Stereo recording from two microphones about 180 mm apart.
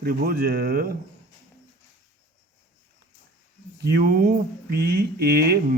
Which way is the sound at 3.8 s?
60° right (ahead or behind).